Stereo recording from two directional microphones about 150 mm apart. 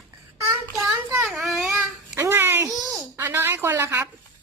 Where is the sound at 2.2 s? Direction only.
15° right (ahead or behind).